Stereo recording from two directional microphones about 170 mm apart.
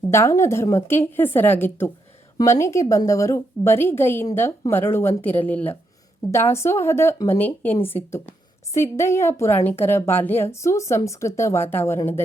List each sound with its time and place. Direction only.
0.1 s speech: 15° left (ahead or behind)